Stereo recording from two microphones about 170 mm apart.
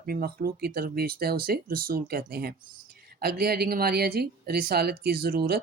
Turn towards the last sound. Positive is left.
turn(degrees=-65)  # may be behind; listen again after turning